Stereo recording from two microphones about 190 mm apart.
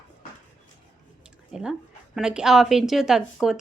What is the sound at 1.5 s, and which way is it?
Speech, 5° right (ahead or behind).